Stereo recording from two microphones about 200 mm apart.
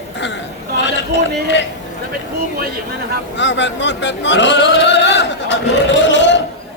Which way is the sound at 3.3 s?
65° left (ahead or behind).